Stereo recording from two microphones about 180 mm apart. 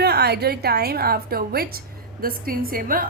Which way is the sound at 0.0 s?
65° right (ahead or behind).